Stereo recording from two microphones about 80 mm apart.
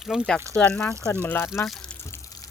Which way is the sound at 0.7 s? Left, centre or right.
Left.